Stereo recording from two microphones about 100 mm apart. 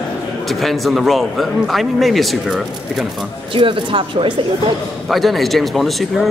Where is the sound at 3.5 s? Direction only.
60° right (ahead or behind).